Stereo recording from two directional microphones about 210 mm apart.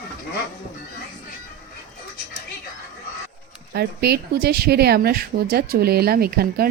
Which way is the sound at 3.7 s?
50° right (ahead or behind).